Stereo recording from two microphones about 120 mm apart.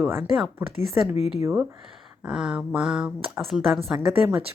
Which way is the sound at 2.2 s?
5° right (ahead or behind).